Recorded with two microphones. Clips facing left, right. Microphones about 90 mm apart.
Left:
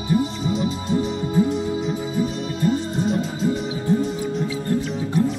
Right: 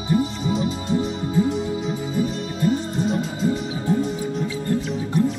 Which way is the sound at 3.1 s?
Centre (ahead or behind).